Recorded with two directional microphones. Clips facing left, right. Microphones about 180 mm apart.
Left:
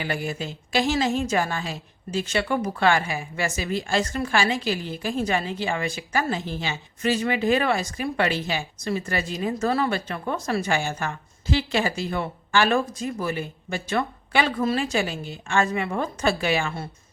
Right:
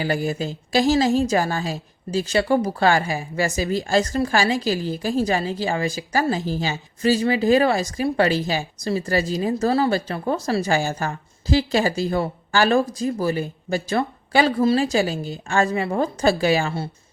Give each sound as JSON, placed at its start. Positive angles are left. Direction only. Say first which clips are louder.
{"t": 0.0, "sound": "a woman's voice", "louder": "right 5 dB", "side_deg": -35}